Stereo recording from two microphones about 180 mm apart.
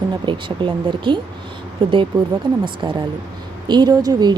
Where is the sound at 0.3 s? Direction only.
25° right (ahead or behind).